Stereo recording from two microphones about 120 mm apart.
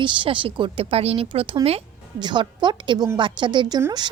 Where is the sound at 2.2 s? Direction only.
40° right (ahead or behind).